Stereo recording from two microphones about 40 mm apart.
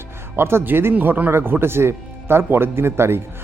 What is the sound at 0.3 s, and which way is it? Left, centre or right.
Speech, right.